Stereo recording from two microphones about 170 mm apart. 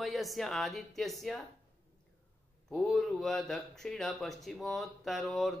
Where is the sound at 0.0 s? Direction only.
Centre (ahead or behind).